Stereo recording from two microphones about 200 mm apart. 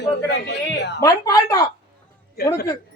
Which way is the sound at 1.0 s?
15° left (ahead or behind).